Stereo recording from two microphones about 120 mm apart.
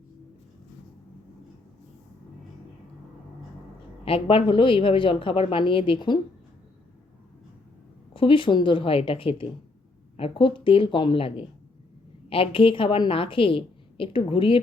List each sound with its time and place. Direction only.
4.0 s a woman's voice: 50° left (ahead or behind)
8.1 s a woman's voice: 45° left (ahead or behind)